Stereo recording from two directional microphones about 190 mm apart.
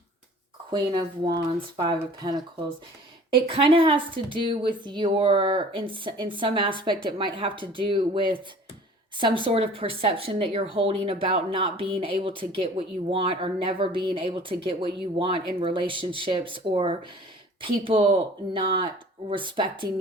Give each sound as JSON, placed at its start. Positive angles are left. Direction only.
{"t": 0.7, "sound": "speech", "side_deg": -25}